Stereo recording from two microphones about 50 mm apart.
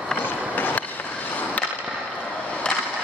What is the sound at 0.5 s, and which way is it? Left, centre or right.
Skateboard, left.